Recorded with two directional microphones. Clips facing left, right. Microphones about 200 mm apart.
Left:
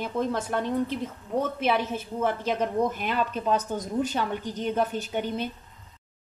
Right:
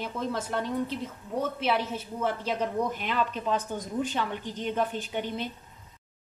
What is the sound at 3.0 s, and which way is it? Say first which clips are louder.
A woman's voice: left 2 dB; 45° left (ahead or behind).